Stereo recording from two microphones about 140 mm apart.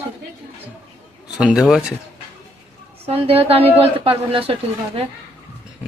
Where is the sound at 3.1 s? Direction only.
45° right (ahead or behind).